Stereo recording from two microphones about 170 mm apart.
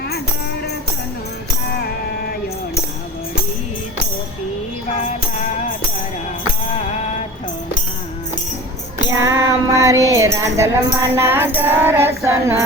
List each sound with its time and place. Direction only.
9.2 s child singing: 20° right (ahead or behind)
10.1 s music: 15° right (ahead or behind)